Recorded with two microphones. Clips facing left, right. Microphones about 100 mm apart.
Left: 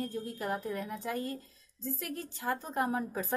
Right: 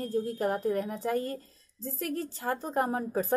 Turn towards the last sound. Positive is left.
turn(degrees=-35)  # may be behind; listen again after turning